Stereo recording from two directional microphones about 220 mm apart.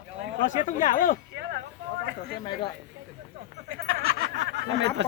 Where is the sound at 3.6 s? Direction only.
65° right (ahead or behind).